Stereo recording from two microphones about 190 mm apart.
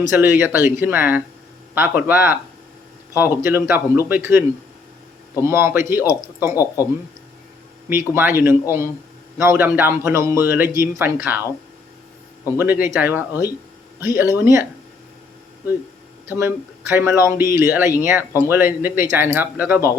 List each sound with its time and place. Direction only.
0.1 s speech: 10° right (ahead or behind)
7.9 s speech: 10° right (ahead or behind)
9.4 s speech: 15° right (ahead or behind)
12.5 s speech: 10° right (ahead or behind)
16.3 s speech: 10° right (ahead or behind)